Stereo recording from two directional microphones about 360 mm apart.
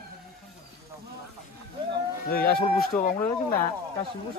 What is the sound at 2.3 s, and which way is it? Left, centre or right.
Speech, left.